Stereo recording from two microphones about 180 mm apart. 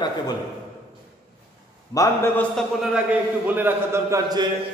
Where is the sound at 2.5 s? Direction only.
5° right (ahead or behind).